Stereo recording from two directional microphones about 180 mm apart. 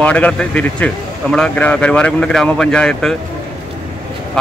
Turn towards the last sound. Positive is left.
turn(degrees=5)  # may be behind; listen again after turning